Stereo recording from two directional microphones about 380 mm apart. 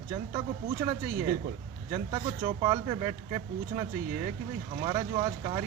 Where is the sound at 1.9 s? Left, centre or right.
Centre.